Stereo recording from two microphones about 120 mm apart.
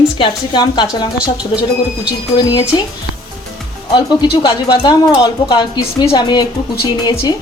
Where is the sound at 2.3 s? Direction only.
35° left (ahead or behind).